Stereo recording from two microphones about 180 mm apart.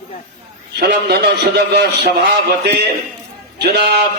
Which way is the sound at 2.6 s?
65° right (ahead or behind).